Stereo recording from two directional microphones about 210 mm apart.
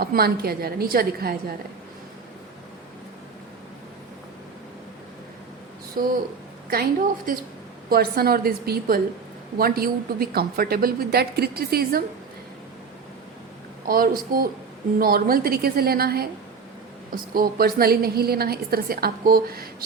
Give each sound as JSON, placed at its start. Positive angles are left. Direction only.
{"t": 0.0, "sound": "a woman's voice", "side_deg": -45}
{"t": 6.0, "sound": "a woman's voice", "side_deg": -40}
{"t": 13.8, "sound": "a woman's voice", "side_deg": -45}